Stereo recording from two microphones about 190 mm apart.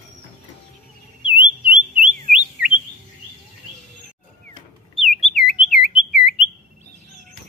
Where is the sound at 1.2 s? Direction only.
25° left (ahead or behind).